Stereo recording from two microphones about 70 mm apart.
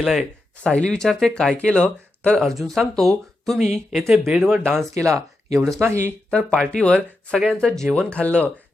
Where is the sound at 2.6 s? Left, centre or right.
Centre.